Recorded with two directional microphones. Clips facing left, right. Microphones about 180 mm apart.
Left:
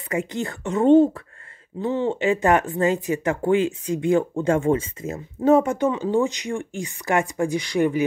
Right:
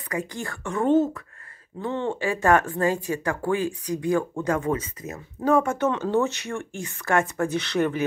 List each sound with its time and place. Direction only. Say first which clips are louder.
0.1 s speech: left 5 dB; 25° left (ahead or behind)